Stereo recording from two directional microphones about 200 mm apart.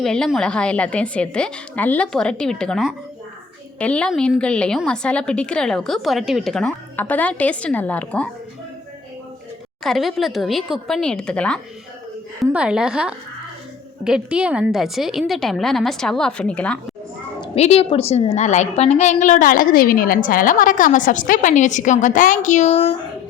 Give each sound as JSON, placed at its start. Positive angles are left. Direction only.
{"t": 0.0, "sound": "a woman's voice", "side_deg": 0}
{"t": 9.8, "sound": "a woman's voice", "side_deg": 0}
{"t": 17.4, "sound": "a woman's voice", "side_deg": 30}